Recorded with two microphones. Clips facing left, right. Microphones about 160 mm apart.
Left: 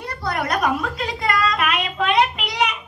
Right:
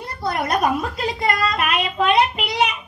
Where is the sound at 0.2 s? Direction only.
20° right (ahead or behind).